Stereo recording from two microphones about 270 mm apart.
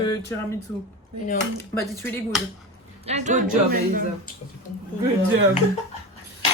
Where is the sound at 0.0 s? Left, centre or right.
Centre.